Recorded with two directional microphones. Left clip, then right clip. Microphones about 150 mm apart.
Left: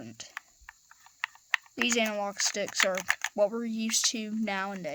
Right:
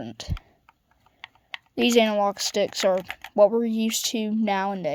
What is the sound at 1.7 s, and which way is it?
Speech, 30° right (ahead or behind).